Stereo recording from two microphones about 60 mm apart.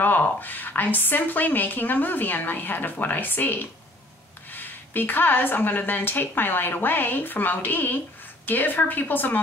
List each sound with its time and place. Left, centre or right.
0.0 s a woman's voice: left